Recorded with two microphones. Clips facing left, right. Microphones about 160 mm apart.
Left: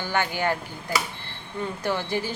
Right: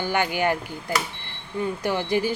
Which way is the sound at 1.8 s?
15° right (ahead or behind).